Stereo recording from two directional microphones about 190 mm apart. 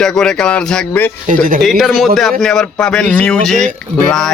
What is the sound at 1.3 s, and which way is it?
Speech, 45° right (ahead or behind).